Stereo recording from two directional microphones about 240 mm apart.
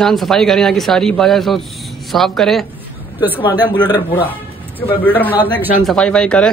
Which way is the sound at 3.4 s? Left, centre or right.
Centre.